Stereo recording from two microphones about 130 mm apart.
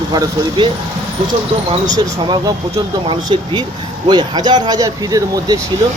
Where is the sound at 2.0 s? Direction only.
35° right (ahead or behind).